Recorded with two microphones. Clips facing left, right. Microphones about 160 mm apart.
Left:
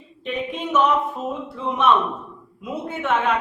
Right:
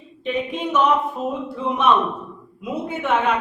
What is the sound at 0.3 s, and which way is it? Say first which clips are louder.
Speech: right 4 dB; centre (ahead or behind).